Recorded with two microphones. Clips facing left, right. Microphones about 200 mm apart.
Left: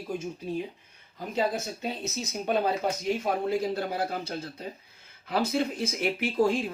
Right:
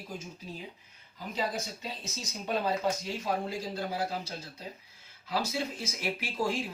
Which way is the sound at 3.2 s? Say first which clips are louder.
Left 4 dB; 60° left (ahead or behind).